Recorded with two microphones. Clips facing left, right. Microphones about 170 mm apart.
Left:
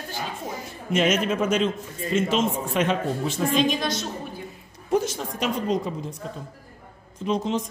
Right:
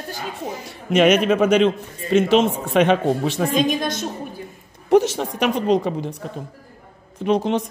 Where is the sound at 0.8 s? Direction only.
65° right (ahead or behind).